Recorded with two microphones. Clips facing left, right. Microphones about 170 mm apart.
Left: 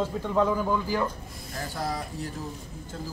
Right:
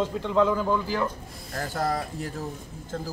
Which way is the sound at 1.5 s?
50° right (ahead or behind).